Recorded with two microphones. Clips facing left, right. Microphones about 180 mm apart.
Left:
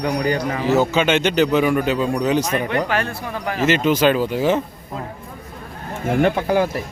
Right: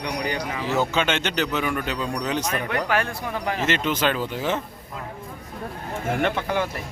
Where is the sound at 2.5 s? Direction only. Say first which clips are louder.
Left 4 dB; centre (ahead or behind).